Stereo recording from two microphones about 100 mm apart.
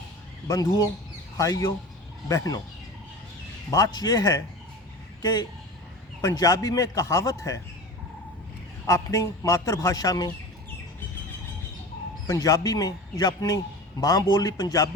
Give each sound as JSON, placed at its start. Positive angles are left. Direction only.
{"t": 0.4, "sound": "a man's voice", "side_deg": 35}
{"t": 3.7, "sound": "a man's voice", "side_deg": 35}
{"t": 8.9, "sound": "a man's voice", "side_deg": 35}
{"t": 12.3, "sound": "a man's voice", "side_deg": 35}